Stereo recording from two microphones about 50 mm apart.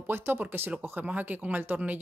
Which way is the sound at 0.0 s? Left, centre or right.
Right.